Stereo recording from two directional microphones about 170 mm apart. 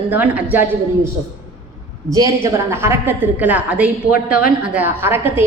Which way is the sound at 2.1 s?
20° right (ahead or behind).